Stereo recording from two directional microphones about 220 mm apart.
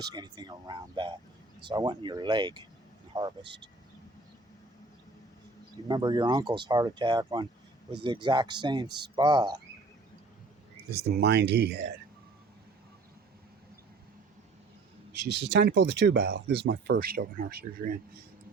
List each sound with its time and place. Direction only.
0.0 s speech: 20° right (ahead or behind)
5.9 s speech: 20° right (ahead or behind)
10.9 s speech: 50° right (ahead or behind)
15.1 s speech: 50° right (ahead or behind)